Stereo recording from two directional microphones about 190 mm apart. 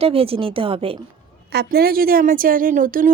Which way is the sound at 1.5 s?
55° right (ahead or behind).